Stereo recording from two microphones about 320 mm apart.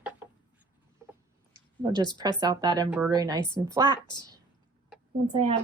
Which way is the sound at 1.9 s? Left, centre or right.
Centre.